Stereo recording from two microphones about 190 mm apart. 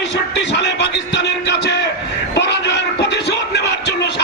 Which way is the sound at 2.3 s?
65° left (ahead or behind).